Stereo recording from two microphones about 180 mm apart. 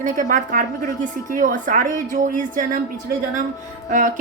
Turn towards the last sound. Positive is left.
turn(degrees=-45)  # may be behind; listen again after turning